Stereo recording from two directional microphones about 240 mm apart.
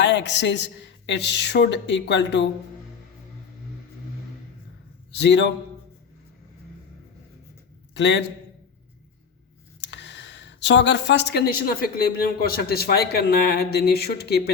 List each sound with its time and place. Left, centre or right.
0.0 s a woman's voice: left
5.1 s a woman's voice: left
7.9 s a woman's voice: left
9.8 s speech: left